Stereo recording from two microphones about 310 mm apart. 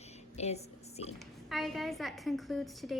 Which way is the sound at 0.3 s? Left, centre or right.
Left.